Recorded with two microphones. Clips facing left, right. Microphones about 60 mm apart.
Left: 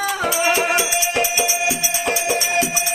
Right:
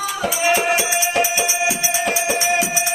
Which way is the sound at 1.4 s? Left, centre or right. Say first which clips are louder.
Right 1 dB; centre.